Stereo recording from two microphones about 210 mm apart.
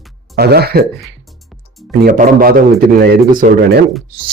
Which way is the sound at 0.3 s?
50° right (ahead or behind).